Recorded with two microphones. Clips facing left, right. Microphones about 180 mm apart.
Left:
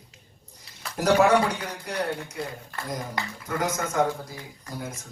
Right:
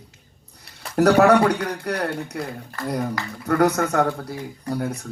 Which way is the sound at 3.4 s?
65° right (ahead or behind).